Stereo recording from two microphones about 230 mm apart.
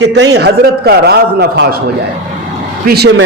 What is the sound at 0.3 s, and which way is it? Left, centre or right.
A man's voice, right.